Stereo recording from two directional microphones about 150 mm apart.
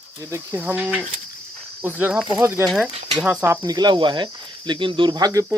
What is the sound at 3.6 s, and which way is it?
Speech, 25° right (ahead or behind).